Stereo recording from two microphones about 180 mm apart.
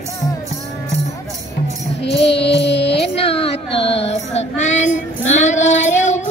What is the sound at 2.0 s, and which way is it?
Music, 70° left (ahead or behind).